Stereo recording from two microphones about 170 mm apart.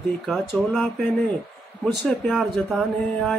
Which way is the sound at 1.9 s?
Centre (ahead or behind).